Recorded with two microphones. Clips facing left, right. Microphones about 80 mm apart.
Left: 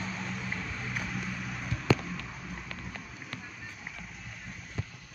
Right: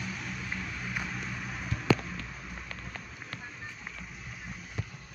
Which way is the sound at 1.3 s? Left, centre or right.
Centre.